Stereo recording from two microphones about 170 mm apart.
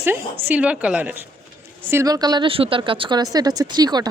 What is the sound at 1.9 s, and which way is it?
A woman's voice, 20° right (ahead or behind).